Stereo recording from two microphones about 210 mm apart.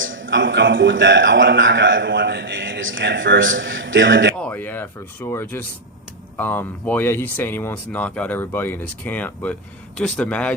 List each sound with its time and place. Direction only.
0.0 s a man's voice: 65° right (ahead or behind)
4.4 s a man's voice: 5° left (ahead or behind)